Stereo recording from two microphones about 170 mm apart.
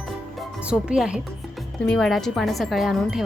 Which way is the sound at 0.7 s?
5° right (ahead or behind).